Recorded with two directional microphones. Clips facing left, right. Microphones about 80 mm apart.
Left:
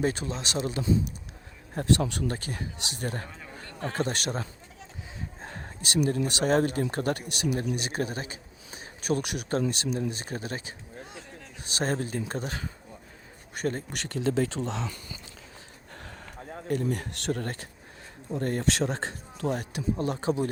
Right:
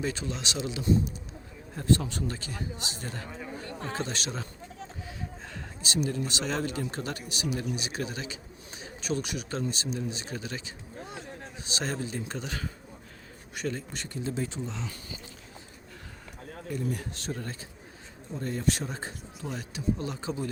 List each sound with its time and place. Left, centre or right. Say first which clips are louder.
0.0 s speech: left 4 dB; left
1.7 s speech: left 1 dB; left
3.2 s speech: right 4 dB; centre
3.6 s a sound: right 3 dB; right
3.8 s speech: left 5 dB; left
5.4 s a sound: left 2 dB; left
5.8 s speech: left 4 dB; left
13.6 s speech: left 3 dB; left
13.9 s speech: left 7 dB; left
16.6 s speech: left 4 dB; left
19.5 s speech: left 3 dB; left